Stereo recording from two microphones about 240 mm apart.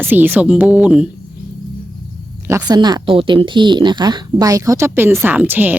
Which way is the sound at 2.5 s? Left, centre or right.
Centre.